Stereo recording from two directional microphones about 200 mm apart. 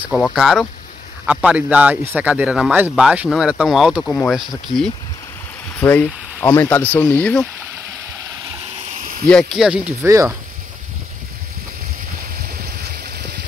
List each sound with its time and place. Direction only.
0.0 s speech: centre (ahead or behind)
5.8 s speech: 10° left (ahead or behind)
9.3 s speech: centre (ahead or behind); by 10.3 s 15° right (ahead or behind)
13.0 s a sound: 55° right (ahead or behind)